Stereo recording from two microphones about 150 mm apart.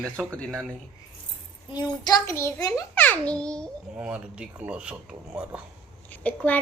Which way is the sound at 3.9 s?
5° right (ahead or behind).